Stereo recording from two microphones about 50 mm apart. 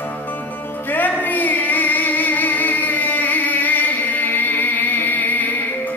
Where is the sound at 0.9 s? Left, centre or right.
Left.